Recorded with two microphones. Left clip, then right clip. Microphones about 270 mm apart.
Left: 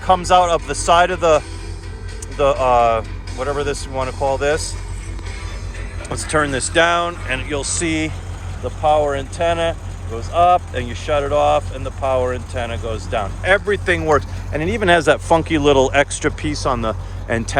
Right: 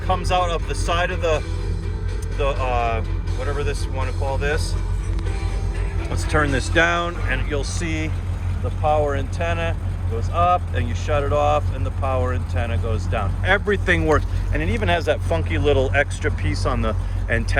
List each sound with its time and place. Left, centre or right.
0.1 s speech: left
2.4 s speech: left
6.1 s speech: centre
13.5 s speech: centre
14.7 s speech: left